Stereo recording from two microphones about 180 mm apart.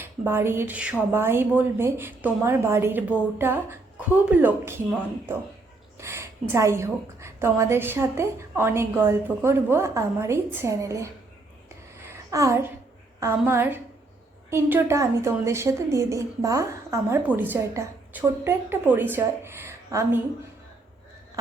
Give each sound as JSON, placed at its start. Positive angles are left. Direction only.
{"t": 0.0, "sound": "a woman's voice", "side_deg": -15}
{"t": 12.0, "sound": "a sound", "side_deg": -15}
{"t": 13.1, "sound": "a woman's voice", "side_deg": -15}